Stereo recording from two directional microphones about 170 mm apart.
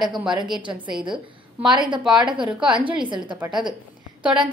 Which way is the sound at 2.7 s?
30° right (ahead or behind).